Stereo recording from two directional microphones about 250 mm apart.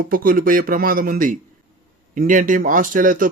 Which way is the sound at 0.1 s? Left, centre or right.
Right.